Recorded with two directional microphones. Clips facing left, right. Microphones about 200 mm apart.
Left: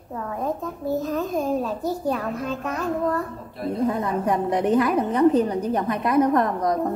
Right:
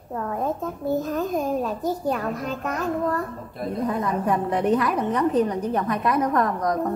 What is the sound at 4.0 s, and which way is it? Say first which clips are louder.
A woman's voice: even; 20° left (ahead or behind).